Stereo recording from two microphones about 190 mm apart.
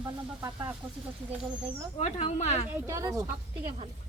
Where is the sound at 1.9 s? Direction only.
35° left (ahead or behind).